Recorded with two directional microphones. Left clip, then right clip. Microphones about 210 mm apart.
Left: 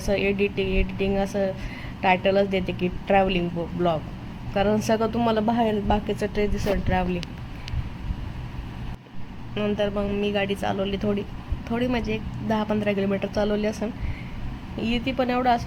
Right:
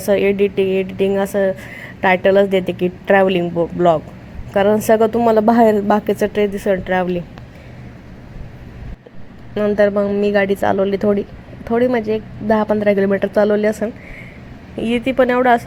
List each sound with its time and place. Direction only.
0.0 s a woman's voice: 10° right (ahead or behind)
9.6 s a woman's voice: 15° right (ahead or behind)